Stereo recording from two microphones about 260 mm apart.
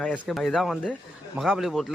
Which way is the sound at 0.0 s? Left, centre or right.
Centre.